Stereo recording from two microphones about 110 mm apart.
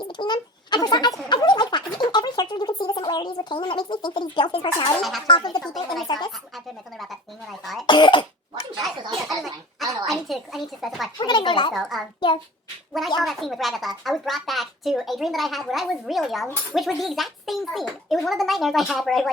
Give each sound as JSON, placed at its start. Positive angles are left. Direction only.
{"t": 0.0, "sound": "a sound", "side_deg": 45}
{"t": 5.3, "sound": "speech", "side_deg": 40}
{"t": 5.7, "sound": "speech", "side_deg": 0}
{"t": 7.6, "sound": "cough", "side_deg": 0}
{"t": 7.9, "sound": "cough", "side_deg": 45}
{"t": 8.8, "sound": "a sound", "side_deg": 0}
{"t": 11.2, "sound": "a sound", "side_deg": 45}
{"t": 11.7, "sound": "speech", "side_deg": 0}
{"t": 13.1, "sound": "speech", "side_deg": 0}